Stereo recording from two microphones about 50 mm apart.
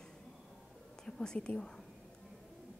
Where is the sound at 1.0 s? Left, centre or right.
Centre.